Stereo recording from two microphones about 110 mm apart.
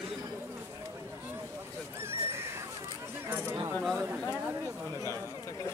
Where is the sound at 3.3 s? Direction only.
20° right (ahead or behind).